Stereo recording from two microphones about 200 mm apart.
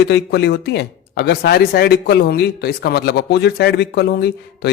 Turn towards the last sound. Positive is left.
turn(degrees=55)  # may be behind; listen again after turning